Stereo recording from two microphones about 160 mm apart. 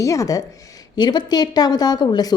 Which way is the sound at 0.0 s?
20° left (ahead or behind).